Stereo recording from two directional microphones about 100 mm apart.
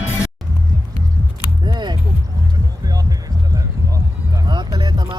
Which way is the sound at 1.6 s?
45° right (ahead or behind).